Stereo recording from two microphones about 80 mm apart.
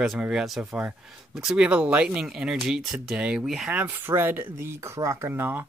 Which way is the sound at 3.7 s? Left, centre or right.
Right.